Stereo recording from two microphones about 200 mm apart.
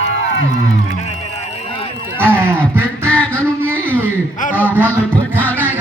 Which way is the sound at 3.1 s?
5° left (ahead or behind).